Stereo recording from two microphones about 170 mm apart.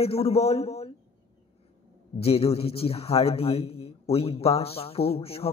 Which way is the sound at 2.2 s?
35° left (ahead or behind).